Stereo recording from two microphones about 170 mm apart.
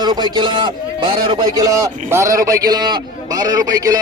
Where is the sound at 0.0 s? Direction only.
25° right (ahead or behind).